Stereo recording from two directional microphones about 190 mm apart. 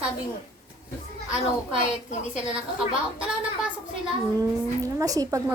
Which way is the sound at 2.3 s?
5° right (ahead or behind).